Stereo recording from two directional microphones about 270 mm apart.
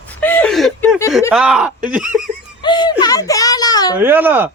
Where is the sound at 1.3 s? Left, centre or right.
Centre.